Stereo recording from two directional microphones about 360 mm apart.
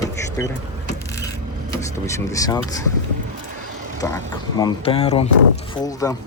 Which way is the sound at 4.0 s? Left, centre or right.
Centre.